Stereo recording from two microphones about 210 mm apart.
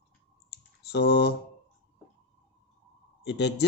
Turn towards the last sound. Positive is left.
turn(degrees=55)  # may be behind; listen again after turning